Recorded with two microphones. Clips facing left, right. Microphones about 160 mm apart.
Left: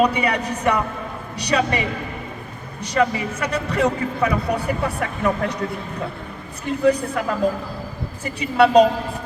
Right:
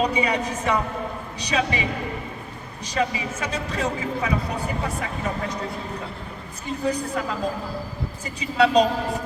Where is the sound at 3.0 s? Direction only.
60° left (ahead or behind).